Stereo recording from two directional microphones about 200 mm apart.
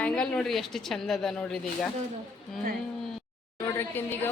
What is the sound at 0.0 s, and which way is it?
Speech, 5° left (ahead or behind).